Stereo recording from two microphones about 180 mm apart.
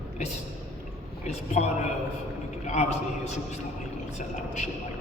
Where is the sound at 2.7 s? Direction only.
40° left (ahead or behind).